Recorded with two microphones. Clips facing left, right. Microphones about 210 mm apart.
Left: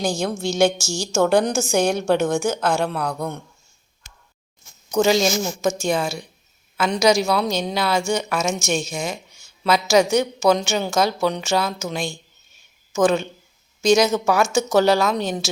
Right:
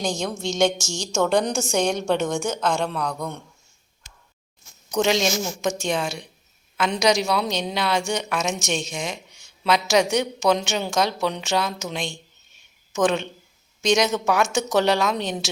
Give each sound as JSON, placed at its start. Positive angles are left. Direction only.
{"t": 0.5, "sound": "a woman's voice", "side_deg": 30}
{"t": 1.1, "sound": "a woman's voice", "side_deg": 5}
{"t": 4.9, "sound": "a woman's voice", "side_deg": 0}